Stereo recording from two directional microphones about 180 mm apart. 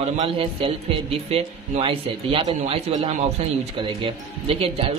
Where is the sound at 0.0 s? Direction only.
35° right (ahead or behind).